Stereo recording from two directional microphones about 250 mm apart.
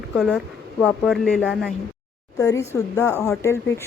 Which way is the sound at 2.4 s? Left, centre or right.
Centre.